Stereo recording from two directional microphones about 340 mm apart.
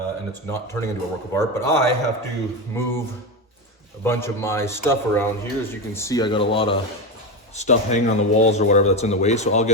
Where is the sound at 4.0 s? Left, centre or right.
Centre.